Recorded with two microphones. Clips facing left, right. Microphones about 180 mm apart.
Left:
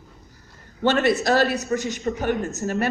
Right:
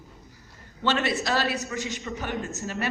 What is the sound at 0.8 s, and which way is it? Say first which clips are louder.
A woman's voice: left 6 dB; 45° left (ahead or behind).